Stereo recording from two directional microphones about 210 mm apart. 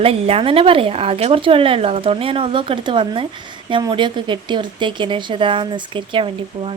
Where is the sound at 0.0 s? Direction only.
25° right (ahead or behind).